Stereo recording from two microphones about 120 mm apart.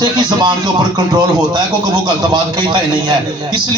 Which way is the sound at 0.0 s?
35° right (ahead or behind).